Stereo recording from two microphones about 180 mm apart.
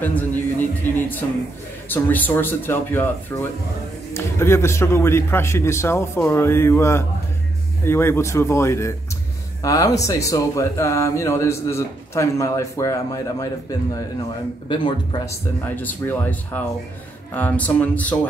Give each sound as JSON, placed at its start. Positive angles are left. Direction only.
{"t": 0.0, "sound": "speech", "side_deg": 10}
{"t": 15.6, "sound": "speech", "side_deg": 10}